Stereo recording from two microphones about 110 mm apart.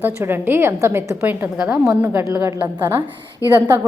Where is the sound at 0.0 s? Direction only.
20° right (ahead or behind).